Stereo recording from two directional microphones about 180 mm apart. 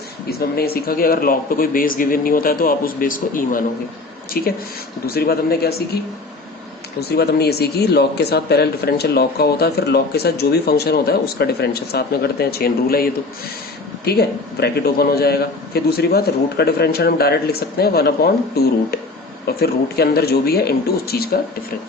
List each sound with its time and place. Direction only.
0.3 s speech: 60° left (ahead or behind)
7.1 s speech: 60° left (ahead or behind)